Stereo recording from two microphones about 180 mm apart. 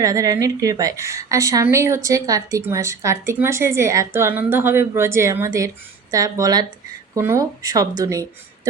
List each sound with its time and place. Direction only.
0.0 s a woman's voice: 20° right (ahead or behind)